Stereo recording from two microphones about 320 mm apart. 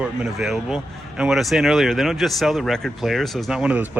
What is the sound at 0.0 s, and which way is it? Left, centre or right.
Speech, centre.